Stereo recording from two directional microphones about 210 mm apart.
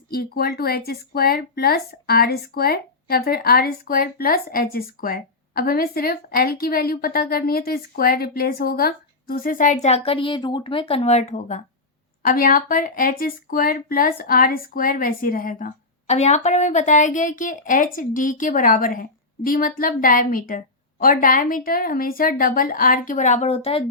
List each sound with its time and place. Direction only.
0.1 s speech: 45° left (ahead or behind); by 23.8 s 30° left (ahead or behind)